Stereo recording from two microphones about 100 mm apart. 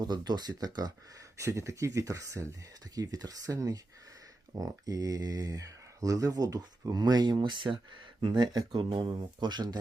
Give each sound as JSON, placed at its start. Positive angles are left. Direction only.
{"t": 0.0, "sound": "speech", "side_deg": -45}
{"t": 1.4, "sound": "speech", "side_deg": -30}